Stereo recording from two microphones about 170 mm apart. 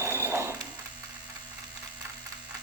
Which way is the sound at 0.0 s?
15° right (ahead or behind).